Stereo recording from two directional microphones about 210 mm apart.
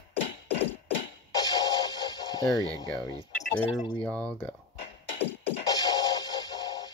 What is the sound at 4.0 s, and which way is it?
Speech, 5° left (ahead or behind).